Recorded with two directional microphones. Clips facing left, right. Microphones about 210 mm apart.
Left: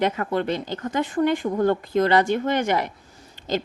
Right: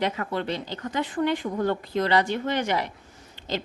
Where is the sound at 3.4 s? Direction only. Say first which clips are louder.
Left 5 dB; 45° left (ahead or behind).